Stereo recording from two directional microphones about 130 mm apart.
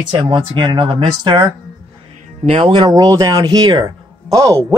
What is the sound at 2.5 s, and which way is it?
Speech, 45° right (ahead or behind).